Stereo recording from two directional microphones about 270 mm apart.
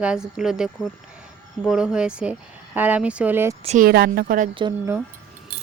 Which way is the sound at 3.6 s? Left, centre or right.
Right.